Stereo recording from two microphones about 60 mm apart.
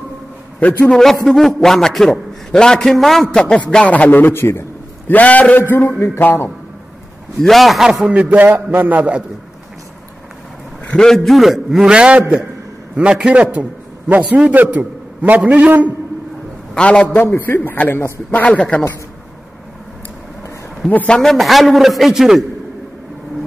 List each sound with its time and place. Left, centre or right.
0.6 s a man's voice: left
0.8 s a man's voice: centre
3.3 s a man's voice: centre; by 5.1 s left
5.1 s a man's voice: left
5.6 s a man's voice: left
7.4 s a man's voice: centre
8.1 s a man's voice: right
10.9 s a man's voice: centre; by 15.9 s right
16.7 s a man's voice: centre
17.2 s a man's voice: left
18.3 s a man's voice: left
21.1 s a man's voice: centre